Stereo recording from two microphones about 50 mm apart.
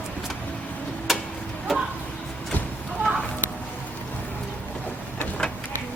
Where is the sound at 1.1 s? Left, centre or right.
Centre.